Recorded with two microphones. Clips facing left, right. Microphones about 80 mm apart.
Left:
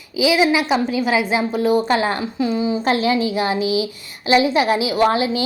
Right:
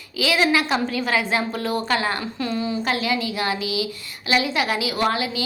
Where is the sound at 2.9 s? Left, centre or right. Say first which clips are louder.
Left 8 dB; left.